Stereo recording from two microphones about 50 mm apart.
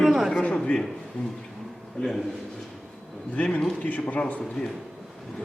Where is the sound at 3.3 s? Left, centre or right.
Left.